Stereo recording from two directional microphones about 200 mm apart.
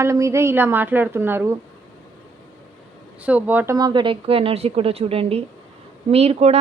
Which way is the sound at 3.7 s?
20° right (ahead or behind).